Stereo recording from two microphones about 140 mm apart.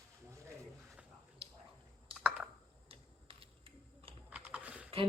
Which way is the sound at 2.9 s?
40° right (ahead or behind).